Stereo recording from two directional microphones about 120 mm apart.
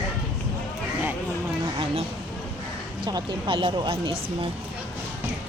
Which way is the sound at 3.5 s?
45° right (ahead or behind).